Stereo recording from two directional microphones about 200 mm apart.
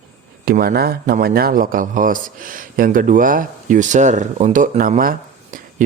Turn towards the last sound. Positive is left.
turn(degrees=-45)  # may be behind; listen again after turning